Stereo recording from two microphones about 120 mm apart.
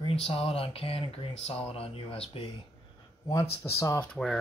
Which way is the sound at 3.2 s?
30° left (ahead or behind).